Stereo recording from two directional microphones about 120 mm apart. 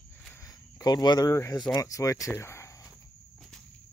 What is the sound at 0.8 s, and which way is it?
Speech, 35° left (ahead or behind).